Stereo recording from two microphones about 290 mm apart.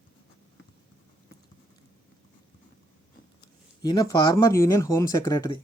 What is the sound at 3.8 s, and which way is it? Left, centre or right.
Speech, centre.